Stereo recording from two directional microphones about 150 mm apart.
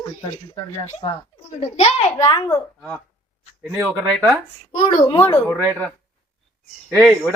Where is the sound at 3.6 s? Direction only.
5° right (ahead or behind).